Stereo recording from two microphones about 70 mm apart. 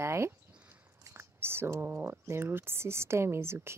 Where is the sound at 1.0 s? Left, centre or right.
Right.